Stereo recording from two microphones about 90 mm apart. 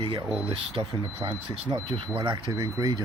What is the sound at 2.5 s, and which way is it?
Speech, 45° right (ahead or behind).